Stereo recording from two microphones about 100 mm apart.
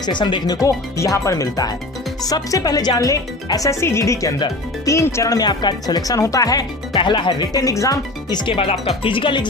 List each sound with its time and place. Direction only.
0.0 s speech: 50° left (ahead or behind)
6.9 s speech: 55° left (ahead or behind)
8.5 s speech: 80° left
9.0 s speech: 60° left (ahead or behind)